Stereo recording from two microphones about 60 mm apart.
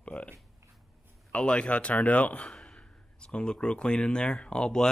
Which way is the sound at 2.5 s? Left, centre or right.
Centre.